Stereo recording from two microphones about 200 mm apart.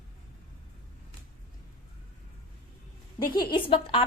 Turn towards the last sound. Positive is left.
turn(degrees=25)  # may be behind; listen again after turning